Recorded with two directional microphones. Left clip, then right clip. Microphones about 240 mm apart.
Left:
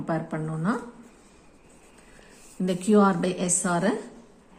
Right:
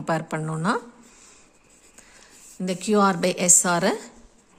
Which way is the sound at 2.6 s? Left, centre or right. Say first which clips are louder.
Right 1 dB; right.